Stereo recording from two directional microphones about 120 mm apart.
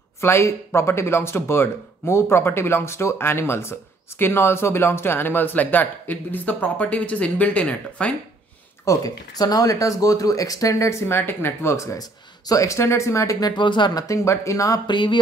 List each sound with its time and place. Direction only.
0.2 s speech: 20° left (ahead or behind)
8.8 s speech: 30° left (ahead or behind)
14.9 s a sound: 40° left (ahead or behind)